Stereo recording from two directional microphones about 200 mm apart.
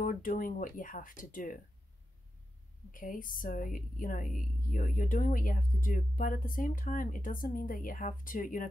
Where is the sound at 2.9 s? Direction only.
45° left (ahead or behind).